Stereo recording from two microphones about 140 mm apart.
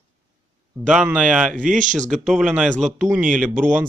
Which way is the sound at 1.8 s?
65° right (ahead or behind).